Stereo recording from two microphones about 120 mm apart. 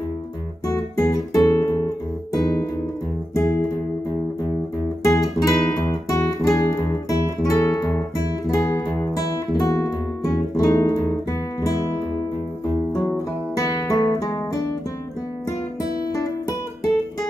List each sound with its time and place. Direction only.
0.7 s music: 25° left (ahead or behind)
5.0 s guitar: 25° left (ahead or behind)
5.9 s music: 25° left (ahead or behind)
6.5 s guitar: 25° left (ahead or behind)
8.5 s music: 25° left (ahead or behind)
13.6 s music: 30° left (ahead or behind)
15.4 s music: 30° left (ahead or behind)